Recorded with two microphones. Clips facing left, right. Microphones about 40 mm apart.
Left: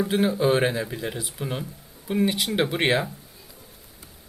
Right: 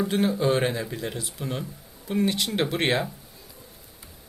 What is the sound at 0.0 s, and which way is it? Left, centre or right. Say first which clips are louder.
Speech: left 2 dB; centre.